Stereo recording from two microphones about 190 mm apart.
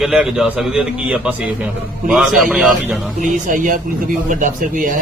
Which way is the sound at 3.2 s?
45° right (ahead or behind).